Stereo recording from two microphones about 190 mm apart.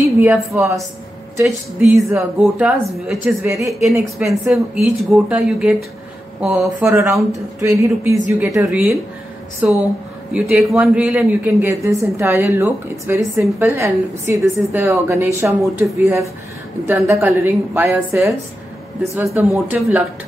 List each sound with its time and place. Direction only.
0.2 s a woman's voice: 10° right (ahead or behind)
6.8 s a woman's voice: 15° right (ahead or behind)